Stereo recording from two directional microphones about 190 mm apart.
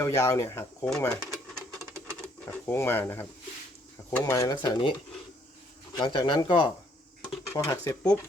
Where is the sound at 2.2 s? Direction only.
5° left (ahead or behind); by 5.0 s 25° left (ahead or behind).